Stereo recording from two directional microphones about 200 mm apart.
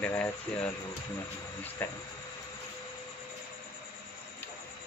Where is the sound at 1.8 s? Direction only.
10° left (ahead or behind).